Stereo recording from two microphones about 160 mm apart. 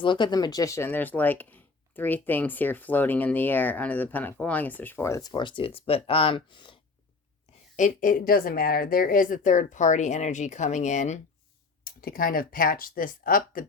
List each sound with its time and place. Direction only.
0.0 s speech: 30° left (ahead or behind)
7.8 s speech: 55° left (ahead or behind)
11.9 s speech: 65° left (ahead or behind)